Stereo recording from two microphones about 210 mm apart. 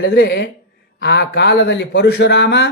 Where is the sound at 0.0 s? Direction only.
55° left (ahead or behind).